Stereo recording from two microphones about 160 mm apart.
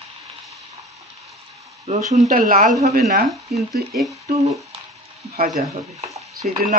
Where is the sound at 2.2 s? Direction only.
60° right (ahead or behind).